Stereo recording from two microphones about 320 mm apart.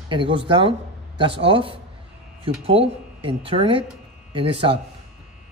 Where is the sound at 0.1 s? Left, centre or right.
Centre.